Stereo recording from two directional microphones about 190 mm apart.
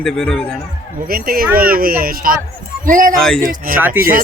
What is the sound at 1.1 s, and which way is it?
Speech, 50° right (ahead or behind).